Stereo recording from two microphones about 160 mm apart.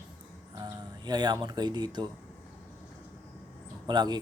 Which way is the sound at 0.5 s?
25° right (ahead or behind).